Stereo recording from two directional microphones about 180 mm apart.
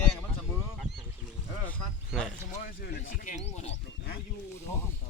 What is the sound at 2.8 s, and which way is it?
Speech, 55° left (ahead or behind).